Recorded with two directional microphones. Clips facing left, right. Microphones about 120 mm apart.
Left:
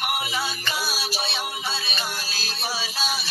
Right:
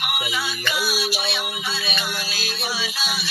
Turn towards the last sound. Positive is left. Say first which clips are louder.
# even
turn(degrees=35)  # may be behind; listen again after turning